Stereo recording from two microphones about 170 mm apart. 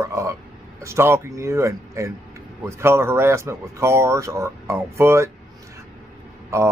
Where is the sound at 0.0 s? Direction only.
15° right (ahead or behind).